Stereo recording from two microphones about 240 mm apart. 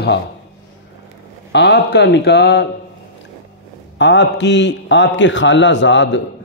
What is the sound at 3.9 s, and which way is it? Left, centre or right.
A man's voice, left.